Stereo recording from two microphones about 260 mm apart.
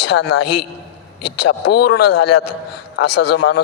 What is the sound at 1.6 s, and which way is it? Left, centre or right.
A man's voice, left.